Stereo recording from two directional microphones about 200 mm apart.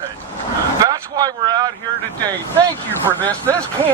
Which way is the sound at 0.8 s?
20° right (ahead or behind).